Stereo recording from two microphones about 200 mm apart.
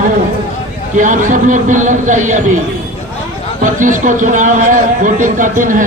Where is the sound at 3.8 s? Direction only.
40° right (ahead or behind).